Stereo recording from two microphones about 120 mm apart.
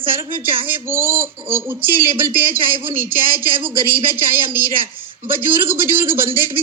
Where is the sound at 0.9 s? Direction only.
20° right (ahead or behind).